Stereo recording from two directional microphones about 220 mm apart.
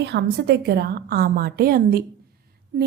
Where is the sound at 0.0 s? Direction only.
50° right (ahead or behind).